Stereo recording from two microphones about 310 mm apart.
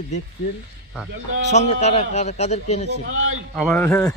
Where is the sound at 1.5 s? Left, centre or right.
Left.